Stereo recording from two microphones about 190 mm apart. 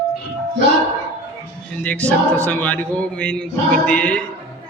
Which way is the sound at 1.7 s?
5° left (ahead or behind).